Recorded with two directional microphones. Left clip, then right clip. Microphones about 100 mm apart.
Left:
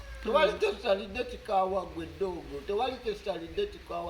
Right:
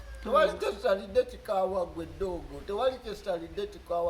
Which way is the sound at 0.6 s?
50° right (ahead or behind).